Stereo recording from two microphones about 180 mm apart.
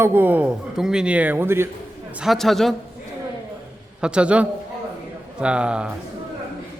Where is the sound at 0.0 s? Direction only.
10° right (ahead or behind).